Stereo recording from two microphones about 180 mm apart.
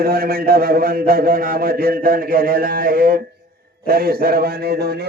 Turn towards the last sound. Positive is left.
turn(degrees=-60)  # may be behind; listen again after turning